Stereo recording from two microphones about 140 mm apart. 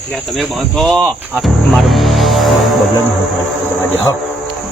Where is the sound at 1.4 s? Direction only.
Centre (ahead or behind).